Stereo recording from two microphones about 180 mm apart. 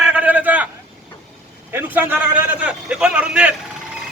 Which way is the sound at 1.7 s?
10° right (ahead or behind).